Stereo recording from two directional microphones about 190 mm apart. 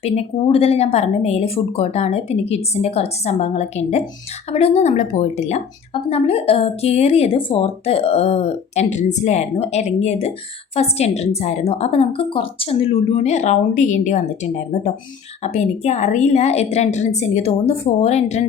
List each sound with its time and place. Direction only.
0.0 s a woman's voice: 30° left (ahead or behind)
15.5 s a woman's voice: 35° left (ahead or behind)